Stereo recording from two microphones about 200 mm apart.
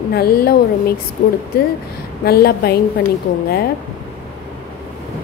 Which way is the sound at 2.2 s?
50° left (ahead or behind).